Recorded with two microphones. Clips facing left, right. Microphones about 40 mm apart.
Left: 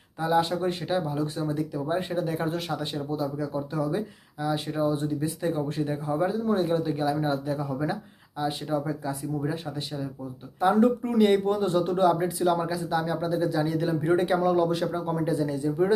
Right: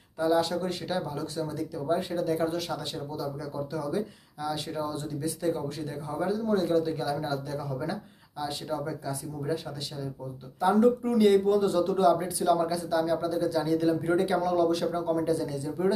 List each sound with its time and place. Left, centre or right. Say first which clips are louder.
0.2 s speech: left 1 dB; left